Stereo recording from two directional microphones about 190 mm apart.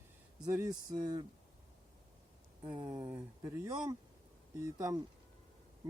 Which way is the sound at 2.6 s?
25° right (ahead or behind).